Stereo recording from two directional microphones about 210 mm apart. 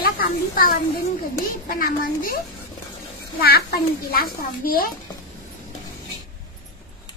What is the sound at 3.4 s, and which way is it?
A child's voice, 45° left (ahead or behind).